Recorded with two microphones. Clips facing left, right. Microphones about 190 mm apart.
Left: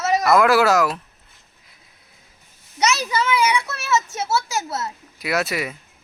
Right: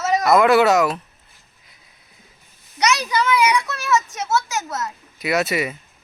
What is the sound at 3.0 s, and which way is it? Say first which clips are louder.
A child's voice: right 2 dB; 25° left (ahead or behind).